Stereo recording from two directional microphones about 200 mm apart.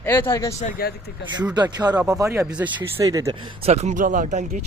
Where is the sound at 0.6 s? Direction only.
50° left (ahead or behind).